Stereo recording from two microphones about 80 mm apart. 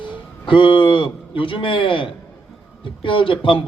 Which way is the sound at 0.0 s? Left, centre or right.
Left.